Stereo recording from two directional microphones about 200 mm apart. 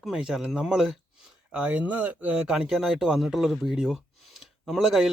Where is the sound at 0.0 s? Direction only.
5° right (ahead or behind).